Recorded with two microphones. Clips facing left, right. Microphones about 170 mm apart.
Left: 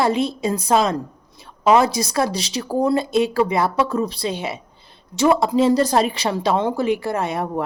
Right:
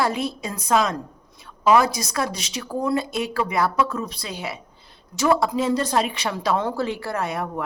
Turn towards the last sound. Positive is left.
turn(degrees=25)  # may be behind; listen again after turning